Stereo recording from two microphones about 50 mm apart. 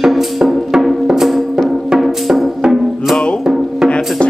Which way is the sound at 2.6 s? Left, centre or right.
Centre.